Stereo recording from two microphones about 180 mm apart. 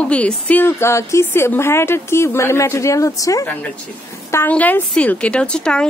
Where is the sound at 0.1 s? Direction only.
10° left (ahead or behind).